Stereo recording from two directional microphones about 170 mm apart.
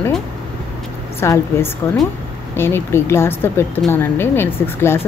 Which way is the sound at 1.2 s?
15° left (ahead or behind).